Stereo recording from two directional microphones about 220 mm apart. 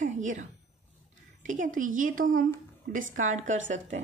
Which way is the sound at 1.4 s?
35° right (ahead or behind).